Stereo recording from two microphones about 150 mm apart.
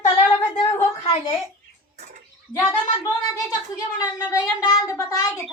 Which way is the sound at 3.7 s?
25° left (ahead or behind).